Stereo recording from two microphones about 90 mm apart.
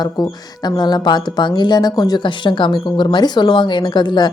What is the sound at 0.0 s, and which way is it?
Speech, 50° left (ahead or behind).